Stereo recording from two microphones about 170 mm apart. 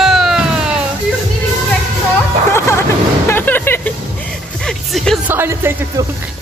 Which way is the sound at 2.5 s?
15° left (ahead or behind).